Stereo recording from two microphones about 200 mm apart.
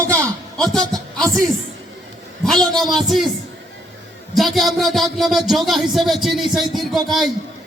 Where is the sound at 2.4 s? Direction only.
Centre (ahead or behind).